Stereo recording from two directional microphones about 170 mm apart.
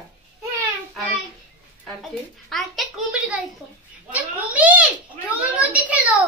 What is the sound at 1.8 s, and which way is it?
A child's voice, centre (ahead or behind).